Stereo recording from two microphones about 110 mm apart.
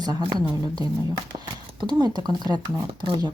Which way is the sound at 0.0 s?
40° right (ahead or behind).